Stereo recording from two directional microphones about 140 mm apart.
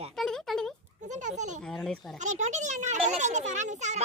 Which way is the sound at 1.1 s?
60° right (ahead or behind).